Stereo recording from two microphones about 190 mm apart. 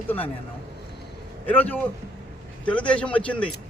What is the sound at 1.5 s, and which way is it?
A man's voice, 10° left (ahead or behind).